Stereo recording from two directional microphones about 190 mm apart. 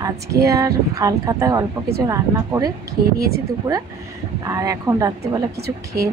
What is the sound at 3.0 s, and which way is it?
Speech, 55° right (ahead or behind).